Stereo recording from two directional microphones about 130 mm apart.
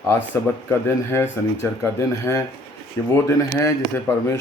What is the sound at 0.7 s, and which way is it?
A man's voice, 20° left (ahead or behind).